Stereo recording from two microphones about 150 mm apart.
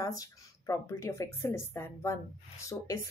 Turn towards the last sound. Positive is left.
turn(degrees=20)  # may be behind; listen again after turning